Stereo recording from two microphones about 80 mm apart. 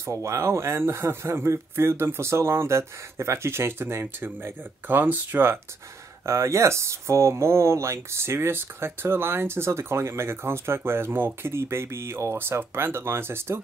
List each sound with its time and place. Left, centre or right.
0.0 s speech: right
6.2 s speech: right